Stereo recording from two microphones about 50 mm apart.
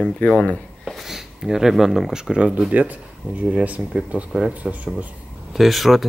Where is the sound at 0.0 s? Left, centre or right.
Centre.